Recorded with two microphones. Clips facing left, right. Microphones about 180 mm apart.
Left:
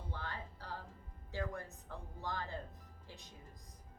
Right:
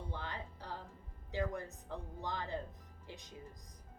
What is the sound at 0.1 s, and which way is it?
Music, 15° right (ahead or behind).